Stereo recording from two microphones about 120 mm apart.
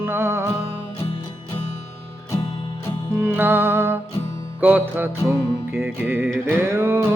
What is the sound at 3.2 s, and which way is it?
Music, 15° right (ahead or behind).